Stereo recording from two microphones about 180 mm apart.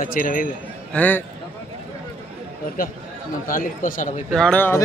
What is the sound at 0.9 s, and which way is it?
Speech, 10° left (ahead or behind).